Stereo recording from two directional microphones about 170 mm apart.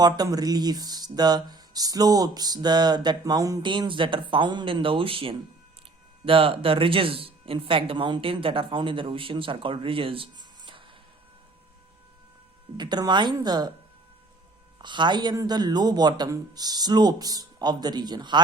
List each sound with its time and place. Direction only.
0.0 s speech: 20° right (ahead or behind)
12.7 s speech: 25° right (ahead or behind)
14.8 s speech: 25° right (ahead or behind)